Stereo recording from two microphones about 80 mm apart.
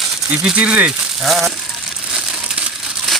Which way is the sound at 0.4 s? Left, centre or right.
Centre.